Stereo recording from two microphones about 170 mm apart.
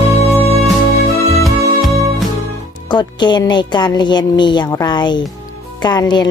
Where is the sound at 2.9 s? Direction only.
25° left (ahead or behind).